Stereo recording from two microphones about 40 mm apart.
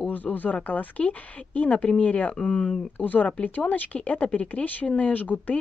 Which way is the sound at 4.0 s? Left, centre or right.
Left.